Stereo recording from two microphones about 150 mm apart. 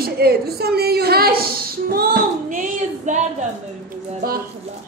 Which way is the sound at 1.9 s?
80° right.